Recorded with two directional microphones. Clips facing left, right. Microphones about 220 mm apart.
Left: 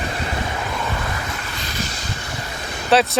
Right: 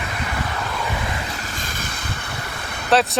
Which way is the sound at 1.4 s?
45° right (ahead or behind).